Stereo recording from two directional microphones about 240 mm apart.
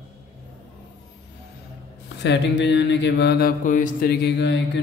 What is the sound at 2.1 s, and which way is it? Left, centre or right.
Mantra, left.